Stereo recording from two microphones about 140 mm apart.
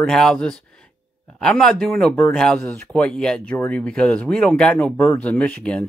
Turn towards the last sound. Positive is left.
turn(degrees=5)  # may be behind; listen again after turning